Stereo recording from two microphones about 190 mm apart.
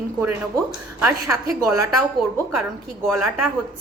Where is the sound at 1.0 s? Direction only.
15° right (ahead or behind).